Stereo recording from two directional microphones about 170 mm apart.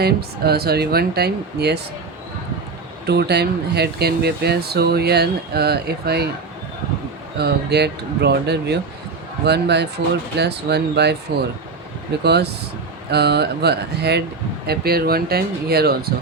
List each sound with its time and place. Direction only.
0.0 s speech: 70° right (ahead or behind)
3.1 s speech: 75° right (ahead or behind)
7.3 s speech: 75° right (ahead or behind)